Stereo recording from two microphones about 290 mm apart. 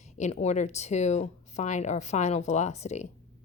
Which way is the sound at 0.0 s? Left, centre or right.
Left.